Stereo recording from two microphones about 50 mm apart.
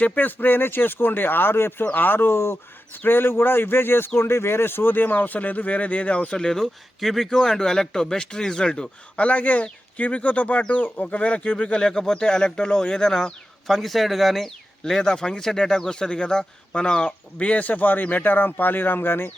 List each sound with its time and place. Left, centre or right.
0.0 s speech: left
2.9 s speech: left